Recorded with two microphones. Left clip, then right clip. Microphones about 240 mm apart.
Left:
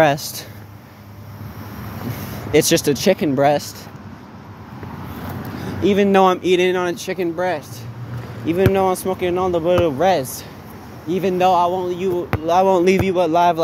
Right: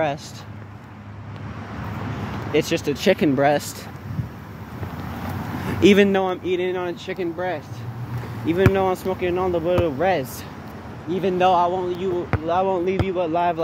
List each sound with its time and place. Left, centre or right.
0.0 s speech: left
2.5 s speech: left
3.3 s speech: centre
5.8 s speech: right
6.1 s speech: left
8.7 s speech: centre